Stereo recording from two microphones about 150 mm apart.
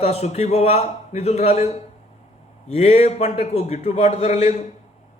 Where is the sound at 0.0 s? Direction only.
45° left (ahead or behind).